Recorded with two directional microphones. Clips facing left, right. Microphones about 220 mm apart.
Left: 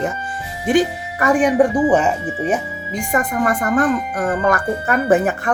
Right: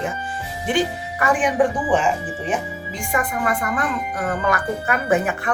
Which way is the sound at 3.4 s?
45° left (ahead or behind).